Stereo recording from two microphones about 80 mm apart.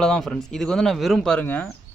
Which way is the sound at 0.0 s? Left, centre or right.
Centre.